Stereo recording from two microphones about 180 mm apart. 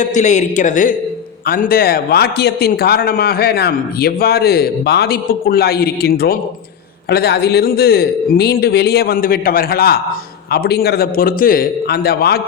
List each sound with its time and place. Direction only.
0.0 s a man's voice: 40° left (ahead or behind); by 12.4 s 60° left (ahead or behind)